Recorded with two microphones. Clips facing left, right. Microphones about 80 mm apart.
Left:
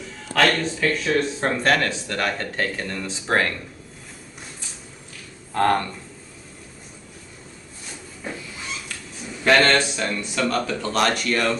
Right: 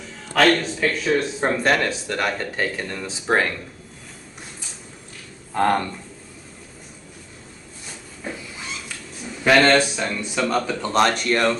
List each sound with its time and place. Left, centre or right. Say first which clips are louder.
0.3 s speech: right 2 dB; centre
5.5 s speech: even; centre
9.4 s speech: right 2 dB; centre
10.9 s speech: right 3 dB; right